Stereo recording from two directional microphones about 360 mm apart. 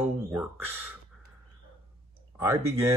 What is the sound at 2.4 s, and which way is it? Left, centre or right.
Speech, centre.